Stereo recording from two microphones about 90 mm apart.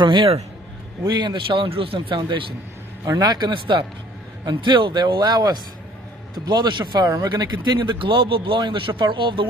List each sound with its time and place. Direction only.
0.0 s a man's voice: 65° right (ahead or behind)
3.1 s a man's voice: 45° right (ahead or behind); by 9.5 s 70° right (ahead or behind)